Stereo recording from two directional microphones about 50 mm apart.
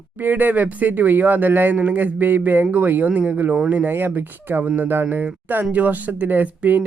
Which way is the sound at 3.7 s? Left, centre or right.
Right.